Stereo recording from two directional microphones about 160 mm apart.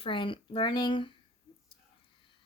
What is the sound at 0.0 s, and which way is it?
Speech, 30° left (ahead or behind).